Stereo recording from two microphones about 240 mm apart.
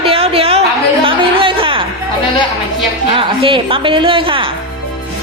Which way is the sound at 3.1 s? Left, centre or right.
Right.